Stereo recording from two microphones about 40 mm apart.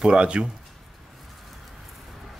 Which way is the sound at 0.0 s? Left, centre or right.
Right.